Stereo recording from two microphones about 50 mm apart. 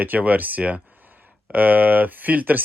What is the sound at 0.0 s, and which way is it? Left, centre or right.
Speech, right.